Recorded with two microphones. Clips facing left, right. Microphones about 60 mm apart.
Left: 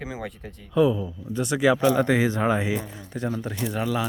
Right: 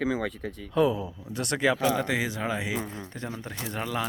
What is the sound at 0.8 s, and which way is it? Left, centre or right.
Speech, centre.